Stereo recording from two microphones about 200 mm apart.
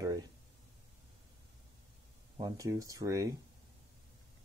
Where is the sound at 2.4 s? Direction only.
20° right (ahead or behind).